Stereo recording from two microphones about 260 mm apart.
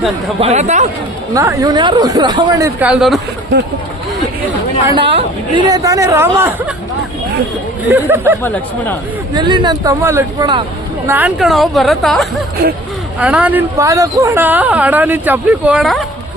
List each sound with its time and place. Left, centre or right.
0.3 s speech: right
1.3 s speech: centre
4.9 s speech: centre
7.9 s speech: centre
8.4 s speech: centre
9.3 s a woman's voice: centre